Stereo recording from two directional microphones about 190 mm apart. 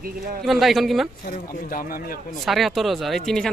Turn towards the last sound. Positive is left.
turn(degrees=0)  # may be behind; listen again after turning